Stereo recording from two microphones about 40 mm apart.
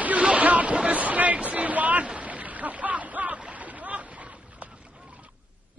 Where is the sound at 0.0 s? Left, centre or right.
Right.